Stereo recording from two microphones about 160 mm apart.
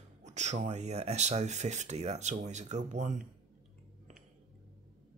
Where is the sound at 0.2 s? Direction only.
45° right (ahead or behind).